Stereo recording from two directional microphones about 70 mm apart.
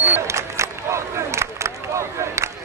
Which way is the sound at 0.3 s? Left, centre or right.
Right.